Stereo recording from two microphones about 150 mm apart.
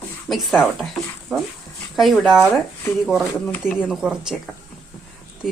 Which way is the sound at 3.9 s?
5° right (ahead or behind).